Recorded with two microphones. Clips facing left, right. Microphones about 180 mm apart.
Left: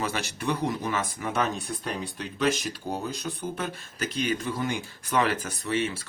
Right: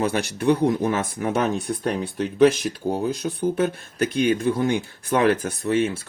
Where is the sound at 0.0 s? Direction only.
55° right (ahead or behind).